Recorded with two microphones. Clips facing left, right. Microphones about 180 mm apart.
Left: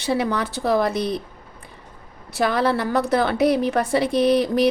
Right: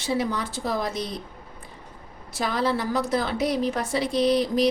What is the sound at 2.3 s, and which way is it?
A woman's voice, 60° left (ahead or behind).